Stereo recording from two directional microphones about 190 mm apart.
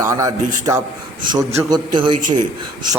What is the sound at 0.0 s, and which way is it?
A man's voice, 15° right (ahead or behind).